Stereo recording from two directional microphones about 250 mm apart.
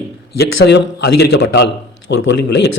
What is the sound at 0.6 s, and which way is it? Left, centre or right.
A man's voice, left.